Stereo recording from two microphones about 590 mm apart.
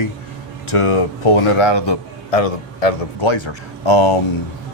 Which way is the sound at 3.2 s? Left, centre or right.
Left.